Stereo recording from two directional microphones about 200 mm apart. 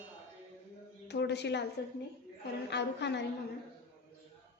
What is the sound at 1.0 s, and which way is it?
Speech, 55° left (ahead or behind).